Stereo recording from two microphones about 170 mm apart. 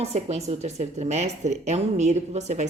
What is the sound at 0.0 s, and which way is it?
A woman's voice, 40° right (ahead or behind).